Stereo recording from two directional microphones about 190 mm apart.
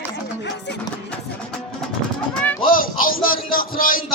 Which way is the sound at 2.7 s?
45° left (ahead or behind).